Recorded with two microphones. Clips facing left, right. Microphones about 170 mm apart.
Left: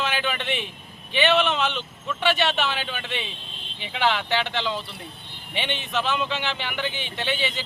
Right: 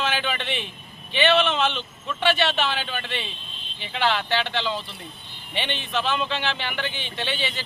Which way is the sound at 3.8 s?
15° left (ahead or behind).